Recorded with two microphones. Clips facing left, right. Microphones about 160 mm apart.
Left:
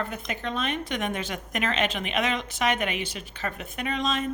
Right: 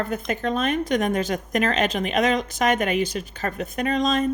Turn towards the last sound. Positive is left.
turn(degrees=-40)  # may be behind; listen again after turning